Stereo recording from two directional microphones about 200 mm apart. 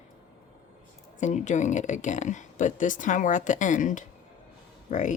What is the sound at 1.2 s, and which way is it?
Speech, 35° left (ahead or behind).